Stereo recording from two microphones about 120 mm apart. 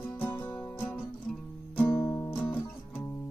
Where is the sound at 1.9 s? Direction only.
20° left (ahead or behind).